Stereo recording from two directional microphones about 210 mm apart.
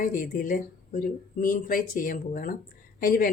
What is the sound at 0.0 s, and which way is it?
Speech, 40° left (ahead or behind).